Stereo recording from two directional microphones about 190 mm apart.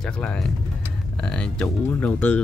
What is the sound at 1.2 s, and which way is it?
Speech, 5° left (ahead or behind).